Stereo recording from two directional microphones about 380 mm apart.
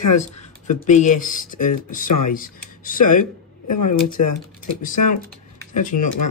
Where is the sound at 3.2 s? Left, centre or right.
Left.